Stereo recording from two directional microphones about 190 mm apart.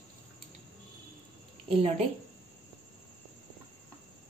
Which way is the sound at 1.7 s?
30° right (ahead or behind).